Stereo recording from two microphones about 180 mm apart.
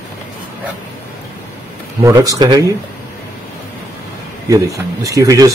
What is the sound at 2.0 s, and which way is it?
Speech, 20° right (ahead or behind).